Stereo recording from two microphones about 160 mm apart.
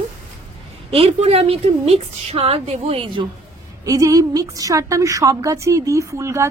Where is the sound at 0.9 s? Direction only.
40° right (ahead or behind).